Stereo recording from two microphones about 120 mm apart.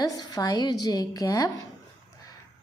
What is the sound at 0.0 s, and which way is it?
A woman's voice, 35° left (ahead or behind).